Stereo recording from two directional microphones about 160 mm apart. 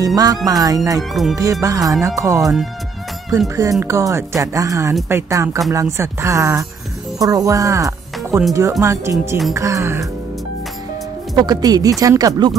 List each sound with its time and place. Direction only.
0.0 s speech: 20° right (ahead or behind)
0.9 s speech: centre (ahead or behind)
1.3 s speech: 20° right (ahead or behind)
2.4 s speech: centre (ahead or behind)
3.3 s speech: 20° right (ahead or behind)
11.3 s speech: 25° right (ahead or behind)